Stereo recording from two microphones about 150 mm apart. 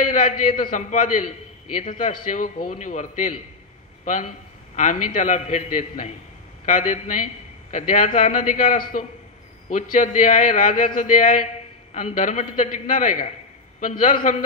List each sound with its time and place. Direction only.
0.0 s a man's voice: 60° left (ahead or behind)